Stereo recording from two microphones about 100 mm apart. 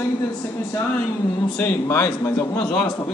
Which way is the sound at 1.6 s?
25° left (ahead or behind).